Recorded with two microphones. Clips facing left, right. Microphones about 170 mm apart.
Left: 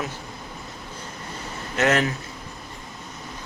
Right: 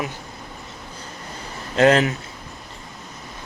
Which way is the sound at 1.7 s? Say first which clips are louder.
Right 6 dB; 30° right (ahead or behind).